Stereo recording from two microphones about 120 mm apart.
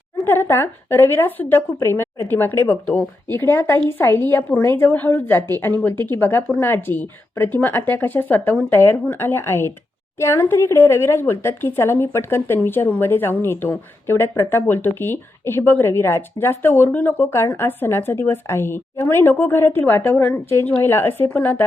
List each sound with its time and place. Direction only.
0.2 s speech: 20° left (ahead or behind)